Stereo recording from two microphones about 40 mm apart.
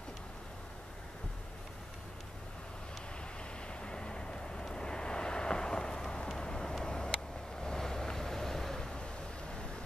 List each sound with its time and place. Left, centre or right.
3.6 s vehicle: left